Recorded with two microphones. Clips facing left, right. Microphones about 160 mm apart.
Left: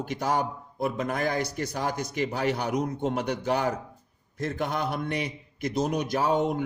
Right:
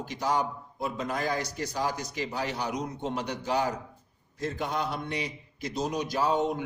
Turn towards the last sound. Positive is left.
turn(degrees=55)  # may be behind; listen again after turning